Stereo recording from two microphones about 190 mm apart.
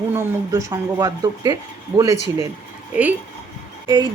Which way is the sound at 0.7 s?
20° right (ahead or behind).